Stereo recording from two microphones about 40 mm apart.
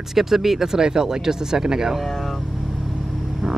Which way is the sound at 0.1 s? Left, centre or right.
Centre.